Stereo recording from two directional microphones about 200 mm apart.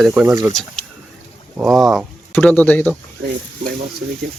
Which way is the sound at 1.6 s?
Centre (ahead or behind).